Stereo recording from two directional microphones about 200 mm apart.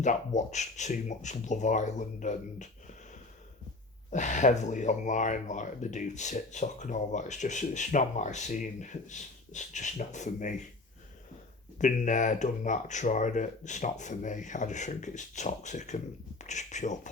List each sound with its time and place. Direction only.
0.0 s speech: 35° left (ahead or behind)
4.1 s speech: 35° left (ahead or behind)
11.8 s speech: 40° left (ahead or behind)